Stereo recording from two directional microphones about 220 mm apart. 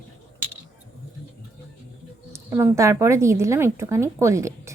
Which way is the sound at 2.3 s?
10° right (ahead or behind).